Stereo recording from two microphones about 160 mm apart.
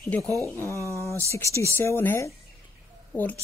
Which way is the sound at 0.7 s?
20° right (ahead or behind).